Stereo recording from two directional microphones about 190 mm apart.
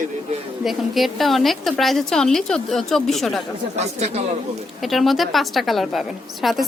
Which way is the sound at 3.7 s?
35° right (ahead or behind).